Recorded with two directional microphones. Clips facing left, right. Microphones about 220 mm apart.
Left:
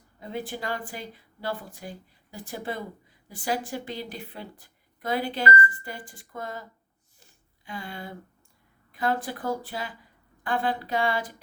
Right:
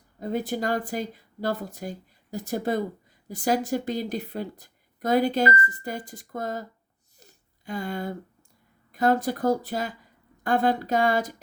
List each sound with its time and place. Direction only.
0.2 s a woman's voice: 40° right (ahead or behind)
7.2 s a sound: 40° right (ahead or behind)
8.9 s speech: 45° right (ahead or behind)